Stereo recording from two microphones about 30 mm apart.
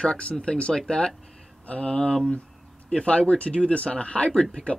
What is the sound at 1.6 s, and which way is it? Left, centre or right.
Speech, left.